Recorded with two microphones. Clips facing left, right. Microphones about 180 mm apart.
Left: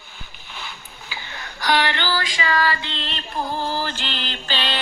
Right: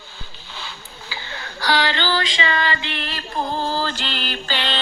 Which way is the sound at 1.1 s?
15° left (ahead or behind).